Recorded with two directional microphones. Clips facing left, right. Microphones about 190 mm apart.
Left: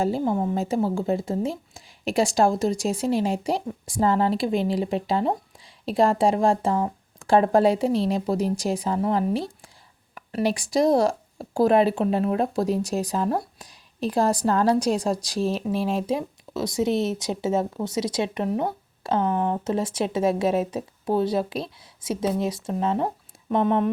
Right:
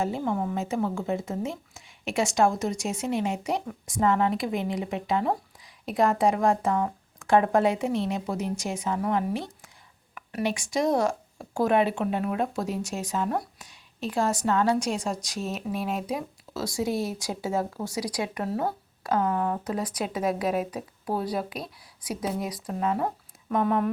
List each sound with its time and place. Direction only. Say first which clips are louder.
0.0 s speech: left 4 dB; 35° left (ahead or behind)